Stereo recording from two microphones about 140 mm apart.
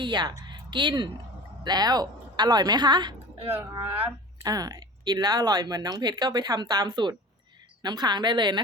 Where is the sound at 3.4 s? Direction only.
15° right (ahead or behind).